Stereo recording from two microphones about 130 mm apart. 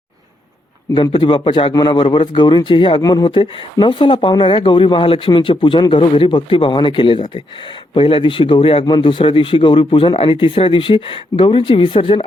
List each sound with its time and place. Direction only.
1.1 s a man's voice: 40° left (ahead or behind)